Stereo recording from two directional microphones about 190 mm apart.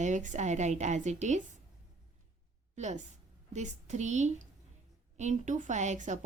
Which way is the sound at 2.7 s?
35° right (ahead or behind).